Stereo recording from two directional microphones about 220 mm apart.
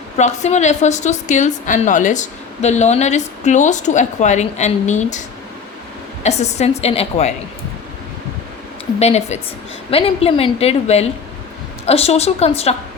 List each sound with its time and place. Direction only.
0.2 s a woman's voice: 30° left (ahead or behind)
6.2 s a woman's voice: 30° left (ahead or behind)
9.0 s a woman's voice: 30° left (ahead or behind)